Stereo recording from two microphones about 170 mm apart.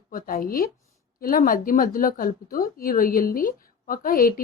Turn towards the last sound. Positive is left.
turn(degrees=55)  # may be behind; listen again after turning